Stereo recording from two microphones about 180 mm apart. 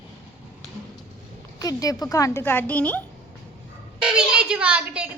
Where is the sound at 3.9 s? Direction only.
5° right (ahead or behind).